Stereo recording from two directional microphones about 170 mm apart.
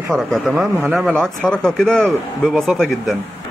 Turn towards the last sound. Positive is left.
turn(degrees=0)  # may be behind; listen again after turning